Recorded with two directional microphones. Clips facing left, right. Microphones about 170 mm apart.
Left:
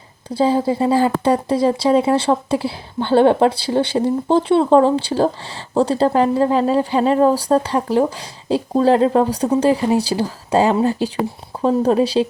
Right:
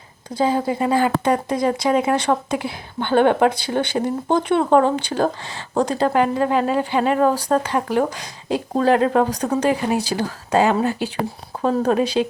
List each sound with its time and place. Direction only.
0.3 s speech: 30° left (ahead or behind)